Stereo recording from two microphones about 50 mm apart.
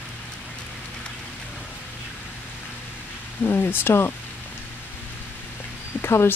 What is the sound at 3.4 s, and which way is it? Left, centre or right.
Speech, left.